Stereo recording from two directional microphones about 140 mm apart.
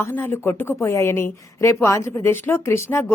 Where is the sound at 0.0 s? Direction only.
15° left (ahead or behind).